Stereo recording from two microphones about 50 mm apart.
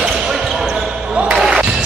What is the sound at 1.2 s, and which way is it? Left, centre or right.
Basketball bounce, centre.